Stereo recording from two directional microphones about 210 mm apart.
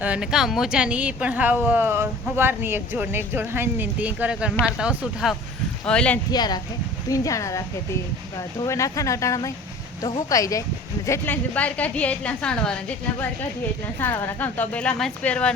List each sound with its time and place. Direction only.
0.0 s speech: 5° right (ahead or behind)
6.3 s a woman's voice: 20° left (ahead or behind)
8.6 s a woman's voice: 15° left (ahead or behind)